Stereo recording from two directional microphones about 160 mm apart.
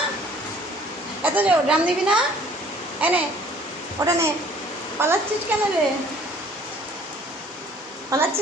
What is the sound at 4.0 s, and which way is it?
A child's voice, 20° right (ahead or behind).